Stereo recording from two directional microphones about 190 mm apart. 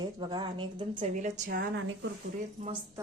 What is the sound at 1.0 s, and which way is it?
Speech, 40° right (ahead or behind).